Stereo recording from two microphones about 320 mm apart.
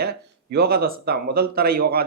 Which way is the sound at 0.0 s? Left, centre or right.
Right.